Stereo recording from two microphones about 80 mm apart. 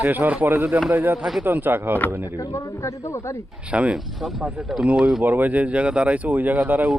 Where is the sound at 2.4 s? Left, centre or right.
Left.